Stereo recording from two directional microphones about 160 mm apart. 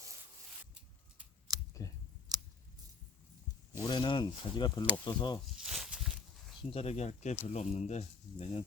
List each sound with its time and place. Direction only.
1.5 s clicking: 20° right (ahead or behind)
2.3 s scissors: 25° right (ahead or behind)
3.8 s speech: 30° left (ahead or behind)
5.7 s a sound: centre (ahead or behind)
6.6 s speech: 35° left (ahead or behind)